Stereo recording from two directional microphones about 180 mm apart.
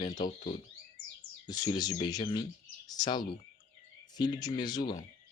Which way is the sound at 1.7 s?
20° left (ahead or behind).